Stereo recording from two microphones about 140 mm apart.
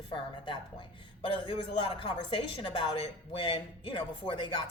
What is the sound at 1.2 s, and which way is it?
A woman's voice, 35° left (ahead or behind).